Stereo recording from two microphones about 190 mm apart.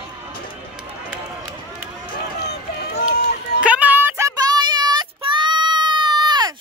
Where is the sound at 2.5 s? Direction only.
55° left (ahead or behind).